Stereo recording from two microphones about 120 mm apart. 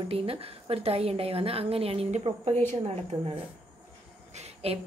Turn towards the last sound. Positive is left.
turn(degrees=-55)  # may be behind; listen again after turning